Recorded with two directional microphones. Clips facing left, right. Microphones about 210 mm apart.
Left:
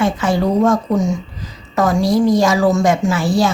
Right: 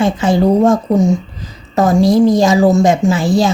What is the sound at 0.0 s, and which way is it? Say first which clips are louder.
A woman's voice: right 4 dB; 20° right (ahead or behind).